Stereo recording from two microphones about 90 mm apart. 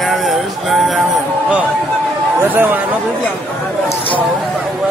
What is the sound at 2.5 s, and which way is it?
Speech, 20° right (ahead or behind).